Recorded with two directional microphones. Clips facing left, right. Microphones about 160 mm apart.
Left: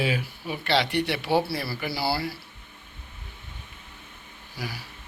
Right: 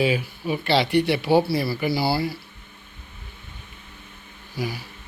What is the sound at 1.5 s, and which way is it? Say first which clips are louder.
Speech: right 7 dB; 15° right (ahead or behind).